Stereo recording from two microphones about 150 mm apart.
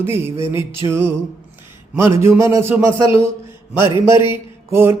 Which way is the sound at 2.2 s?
20° right (ahead or behind).